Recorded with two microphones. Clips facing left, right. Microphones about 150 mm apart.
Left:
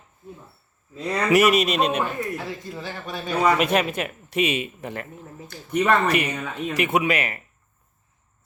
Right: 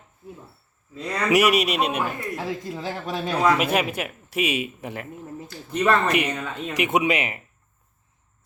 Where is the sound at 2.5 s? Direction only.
90° right.